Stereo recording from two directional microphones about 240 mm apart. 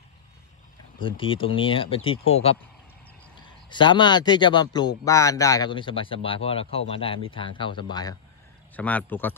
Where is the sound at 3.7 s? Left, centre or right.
Centre.